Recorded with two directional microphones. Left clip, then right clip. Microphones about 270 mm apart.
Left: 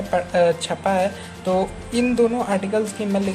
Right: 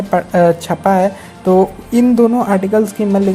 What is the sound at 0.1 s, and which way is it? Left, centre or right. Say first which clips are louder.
A woman's voice: right 6 dB; right.